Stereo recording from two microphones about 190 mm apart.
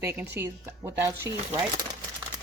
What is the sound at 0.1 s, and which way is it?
Speech, 10° right (ahead or behind).